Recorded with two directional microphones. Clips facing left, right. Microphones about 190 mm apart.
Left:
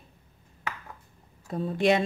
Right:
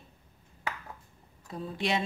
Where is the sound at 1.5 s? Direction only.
50° left (ahead or behind).